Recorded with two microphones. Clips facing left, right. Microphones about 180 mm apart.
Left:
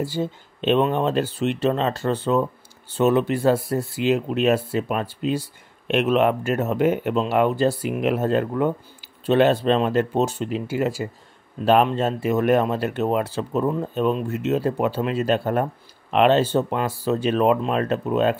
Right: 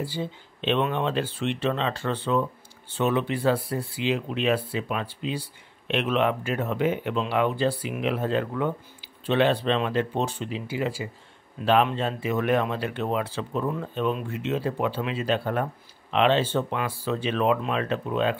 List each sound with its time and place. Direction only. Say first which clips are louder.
0.0 s speech: left 6 dB; 45° left (ahead or behind)